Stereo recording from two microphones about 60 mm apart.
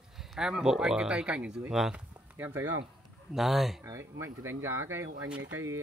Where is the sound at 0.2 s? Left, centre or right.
Centre.